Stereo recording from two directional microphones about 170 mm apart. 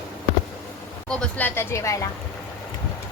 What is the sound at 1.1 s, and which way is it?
Speech, 5° left (ahead or behind).